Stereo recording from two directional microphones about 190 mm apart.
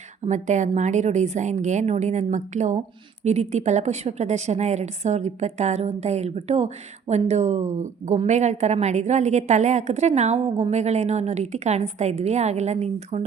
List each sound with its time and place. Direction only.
0.3 s a woman's voice: 40° right (ahead or behind)